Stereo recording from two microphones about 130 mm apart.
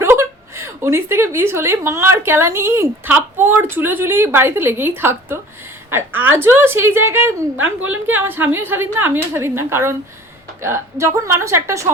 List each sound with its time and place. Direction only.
0.0 s a woman's voice: 20° right (ahead or behind)